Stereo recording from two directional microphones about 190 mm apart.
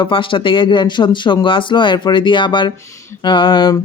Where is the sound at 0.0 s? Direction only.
25° left (ahead or behind).